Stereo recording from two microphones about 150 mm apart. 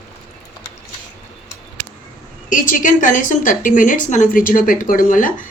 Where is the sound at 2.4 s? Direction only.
65° left (ahead or behind).